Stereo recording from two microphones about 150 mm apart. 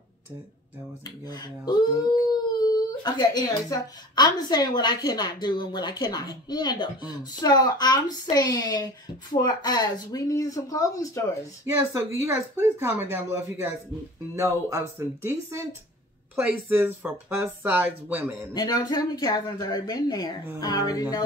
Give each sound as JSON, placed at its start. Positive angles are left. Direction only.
{"t": 1.2, "sound": "a woman's voice", "side_deg": 25}
{"t": 3.0, "sound": "a woman's voice", "side_deg": 25}
{"t": 11.6, "sound": "speech", "side_deg": -15}
{"t": 18.5, "sound": "a woman's voice", "side_deg": 25}